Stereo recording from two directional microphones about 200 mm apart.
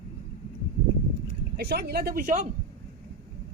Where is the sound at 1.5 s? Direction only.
55° right (ahead or behind).